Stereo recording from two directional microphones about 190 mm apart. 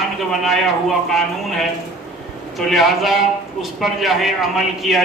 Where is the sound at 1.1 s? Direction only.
Centre (ahead or behind).